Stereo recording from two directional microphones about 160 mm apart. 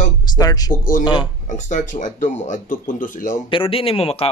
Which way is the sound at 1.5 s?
50° left (ahead or behind).